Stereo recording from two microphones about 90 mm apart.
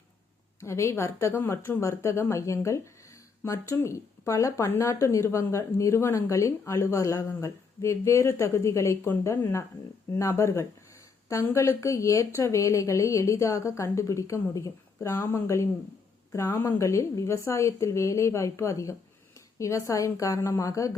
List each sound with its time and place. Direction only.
0.6 s a woman's voice: 30° left (ahead or behind)
11.8 s a woman's voice: 35° left (ahead or behind)